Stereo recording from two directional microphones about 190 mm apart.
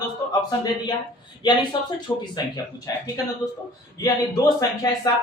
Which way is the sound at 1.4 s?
25° left (ahead or behind).